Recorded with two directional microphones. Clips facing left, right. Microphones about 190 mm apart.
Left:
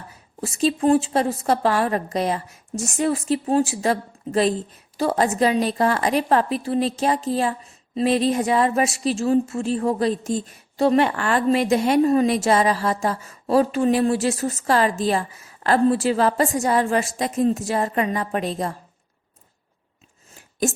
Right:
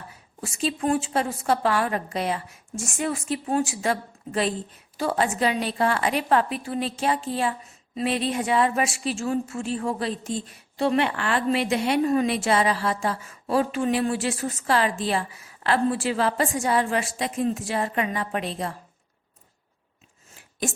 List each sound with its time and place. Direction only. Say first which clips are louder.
0.4 s a woman's voice: left 6 dB; 35° left (ahead or behind)